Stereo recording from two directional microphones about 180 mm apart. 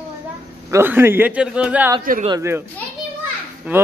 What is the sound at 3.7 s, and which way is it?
Speech, 10° right (ahead or behind).